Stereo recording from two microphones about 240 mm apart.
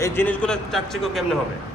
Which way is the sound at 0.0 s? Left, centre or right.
Centre.